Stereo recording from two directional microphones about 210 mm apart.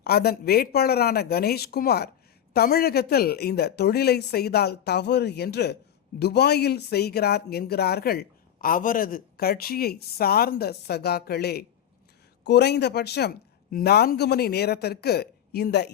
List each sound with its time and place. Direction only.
0.0 s speech: 50° left (ahead or behind)